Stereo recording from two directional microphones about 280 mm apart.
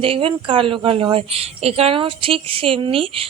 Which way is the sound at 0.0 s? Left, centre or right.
Centre.